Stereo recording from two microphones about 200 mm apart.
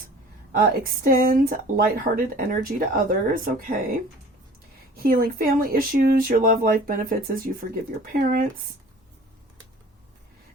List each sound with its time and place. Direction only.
0.5 s speech: 45° right (ahead or behind)
4.9 s speech: 45° right (ahead or behind)